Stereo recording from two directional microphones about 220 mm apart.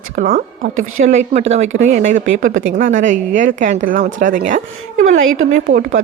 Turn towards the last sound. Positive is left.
turn(degrees=-35)  # may be behind; listen again after turning